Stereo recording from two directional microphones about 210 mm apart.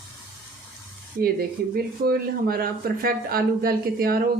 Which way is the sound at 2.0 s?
45° right (ahead or behind).